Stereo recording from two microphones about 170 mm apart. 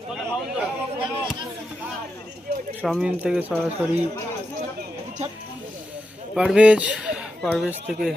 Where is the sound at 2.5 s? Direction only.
65° right (ahead or behind).